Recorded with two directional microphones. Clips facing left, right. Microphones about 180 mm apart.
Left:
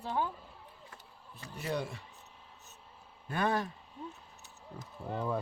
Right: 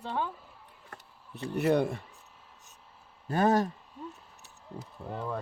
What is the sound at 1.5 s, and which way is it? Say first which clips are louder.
Speech: right 10 dB; 60° right (ahead or behind).